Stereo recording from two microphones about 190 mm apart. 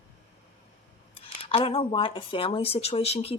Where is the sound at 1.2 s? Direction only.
30° left (ahead or behind).